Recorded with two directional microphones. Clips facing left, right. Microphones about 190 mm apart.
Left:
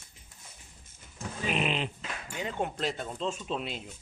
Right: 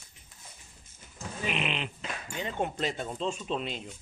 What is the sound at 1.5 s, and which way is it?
Speech, 40° left (ahead or behind).